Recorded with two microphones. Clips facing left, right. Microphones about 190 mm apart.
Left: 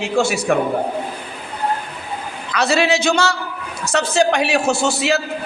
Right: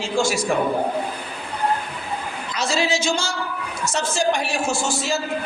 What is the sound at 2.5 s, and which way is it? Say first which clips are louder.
Speech: left 6 dB; 65° left (ahead or behind).